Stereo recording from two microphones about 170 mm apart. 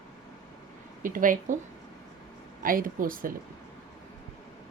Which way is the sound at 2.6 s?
55° right (ahead or behind).